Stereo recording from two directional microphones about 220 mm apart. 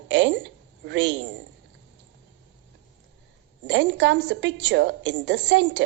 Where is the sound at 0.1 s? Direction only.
55° right (ahead or behind).